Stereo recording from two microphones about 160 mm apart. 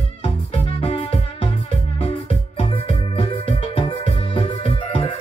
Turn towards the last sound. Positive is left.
turn(degrees=35)  # may be behind; listen again after turning